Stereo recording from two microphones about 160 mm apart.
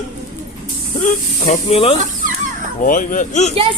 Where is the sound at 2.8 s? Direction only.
55° left (ahead or behind).